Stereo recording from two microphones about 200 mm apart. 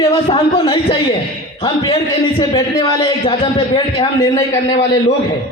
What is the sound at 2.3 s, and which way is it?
A man's voice, 20° left (ahead or behind).